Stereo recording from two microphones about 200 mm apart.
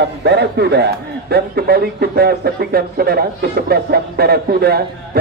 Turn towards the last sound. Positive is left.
turn(degrees=-50)  # may be behind; listen again after turning